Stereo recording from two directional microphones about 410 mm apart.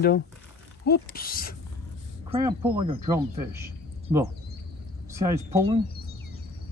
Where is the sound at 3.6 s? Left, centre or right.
Centre.